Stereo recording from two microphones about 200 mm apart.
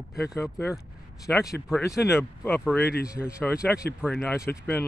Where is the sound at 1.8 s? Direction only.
15° left (ahead or behind).